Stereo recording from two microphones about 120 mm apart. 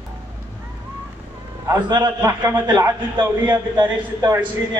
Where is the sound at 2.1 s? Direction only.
20° right (ahead or behind).